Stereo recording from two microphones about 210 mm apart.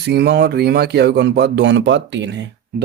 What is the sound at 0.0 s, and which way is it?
Speech, 50° right (ahead or behind).